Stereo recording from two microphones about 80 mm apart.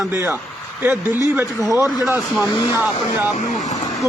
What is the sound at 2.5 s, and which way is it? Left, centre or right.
Speech, left.